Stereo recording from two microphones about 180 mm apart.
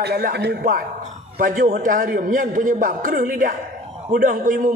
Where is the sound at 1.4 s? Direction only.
50° right (ahead or behind).